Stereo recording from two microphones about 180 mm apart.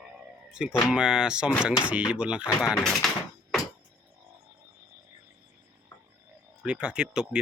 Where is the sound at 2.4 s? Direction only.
20° left (ahead or behind).